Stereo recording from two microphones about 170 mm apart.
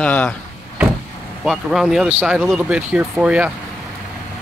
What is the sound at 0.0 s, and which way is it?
Speech, 10° left (ahead or behind).